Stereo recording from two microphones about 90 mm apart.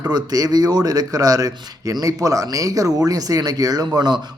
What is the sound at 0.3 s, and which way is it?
Speech, 45° right (ahead or behind).